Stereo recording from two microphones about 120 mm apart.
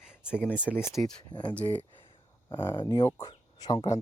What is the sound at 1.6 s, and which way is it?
Speech, 15° left (ahead or behind).